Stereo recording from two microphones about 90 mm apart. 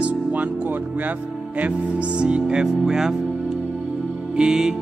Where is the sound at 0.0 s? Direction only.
15° right (ahead or behind).